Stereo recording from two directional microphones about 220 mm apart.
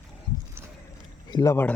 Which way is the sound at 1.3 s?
15° left (ahead or behind).